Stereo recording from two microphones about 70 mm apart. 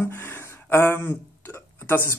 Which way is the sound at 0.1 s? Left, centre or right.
Left.